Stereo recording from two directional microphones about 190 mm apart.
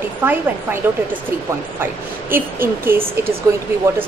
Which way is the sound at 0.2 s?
10° right (ahead or behind).